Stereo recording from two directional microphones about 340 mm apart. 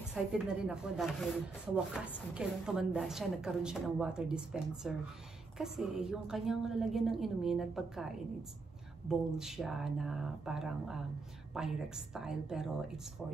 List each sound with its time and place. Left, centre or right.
0.1 s a woman's voice: centre
9.1 s a woman's voice: centre